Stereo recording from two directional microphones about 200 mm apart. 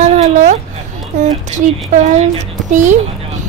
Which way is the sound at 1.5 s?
35° right (ahead or behind).